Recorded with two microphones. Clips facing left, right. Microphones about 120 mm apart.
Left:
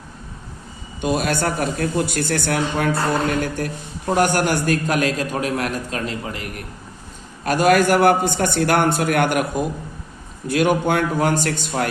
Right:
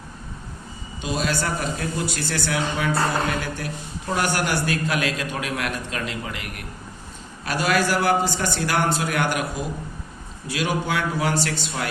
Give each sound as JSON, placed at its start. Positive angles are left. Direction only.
{"t": 1.0, "sound": "a man's voice", "side_deg": 55}